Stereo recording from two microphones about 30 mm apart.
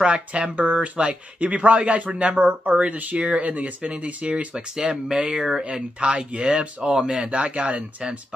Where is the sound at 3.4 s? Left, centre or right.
Right.